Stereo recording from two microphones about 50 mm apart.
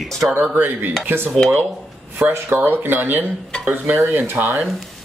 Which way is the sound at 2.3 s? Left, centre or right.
Right.